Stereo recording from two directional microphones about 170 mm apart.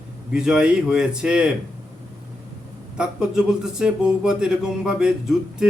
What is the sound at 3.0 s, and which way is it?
Speech, 5° right (ahead or behind).